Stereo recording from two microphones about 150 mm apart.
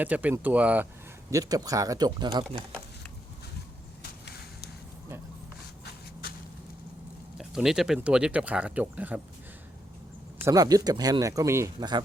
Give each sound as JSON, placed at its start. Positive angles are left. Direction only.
{"t": 0.0, "sound": "speech", "side_deg": -10}
{"t": 1.3, "sound": "speech", "side_deg": -25}
{"t": 7.3, "sound": "speech", "side_deg": 0}
{"t": 10.4, "sound": "speech", "side_deg": -25}